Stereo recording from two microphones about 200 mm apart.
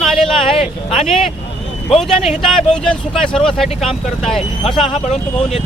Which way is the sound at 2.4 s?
Centre (ahead or behind).